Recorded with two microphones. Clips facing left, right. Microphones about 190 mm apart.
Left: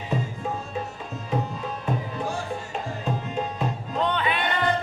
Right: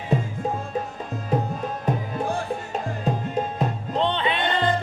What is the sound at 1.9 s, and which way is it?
Music, 40° right (ahead or behind).